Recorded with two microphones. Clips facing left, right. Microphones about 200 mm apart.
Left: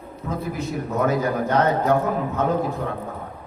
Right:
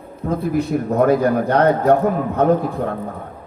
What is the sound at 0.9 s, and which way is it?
Speech, 55° right (ahead or behind).